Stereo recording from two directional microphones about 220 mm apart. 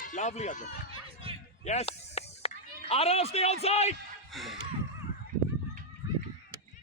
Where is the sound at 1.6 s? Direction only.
30° left (ahead or behind).